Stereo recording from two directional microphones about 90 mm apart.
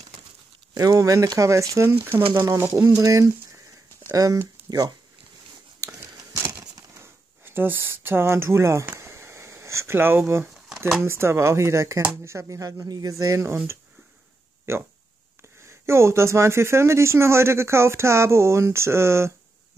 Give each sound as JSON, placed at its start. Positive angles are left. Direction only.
{"t": 0.7, "sound": "speech", "side_deg": -40}
{"t": 4.6, "sound": "speech", "side_deg": -45}
{"t": 5.8, "sound": "a sound", "side_deg": -35}
{"t": 7.0, "sound": "speech", "side_deg": -25}
{"t": 9.0, "sound": "a sound", "side_deg": -30}
{"t": 11.1, "sound": "speech", "side_deg": -30}
{"t": 13.2, "sound": "speech", "side_deg": -35}
{"t": 14.7, "sound": "speech", "side_deg": -30}